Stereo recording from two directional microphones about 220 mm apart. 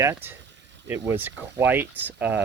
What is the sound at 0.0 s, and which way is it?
Speech, 10° right (ahead or behind).